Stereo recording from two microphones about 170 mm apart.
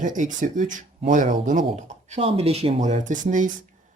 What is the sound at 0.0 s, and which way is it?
Speech, 50° right (ahead or behind).